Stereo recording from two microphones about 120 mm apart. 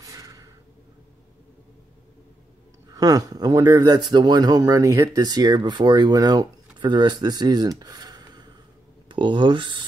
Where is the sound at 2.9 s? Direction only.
30° right (ahead or behind).